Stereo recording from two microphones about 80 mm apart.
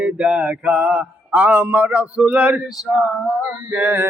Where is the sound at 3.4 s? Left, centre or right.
Right.